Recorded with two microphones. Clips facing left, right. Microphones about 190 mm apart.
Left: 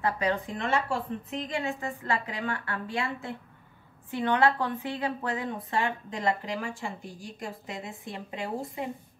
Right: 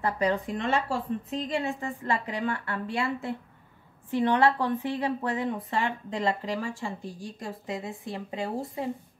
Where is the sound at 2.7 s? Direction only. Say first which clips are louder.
Right 2 dB; 35° right (ahead or behind).